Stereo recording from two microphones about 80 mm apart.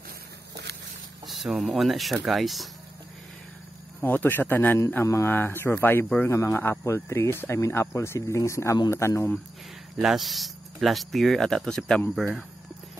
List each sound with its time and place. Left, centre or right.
1.2 s speech: centre
4.0 s speech: left
5.0 s speech: left
5.3 s speech: left
9.9 s speech: centre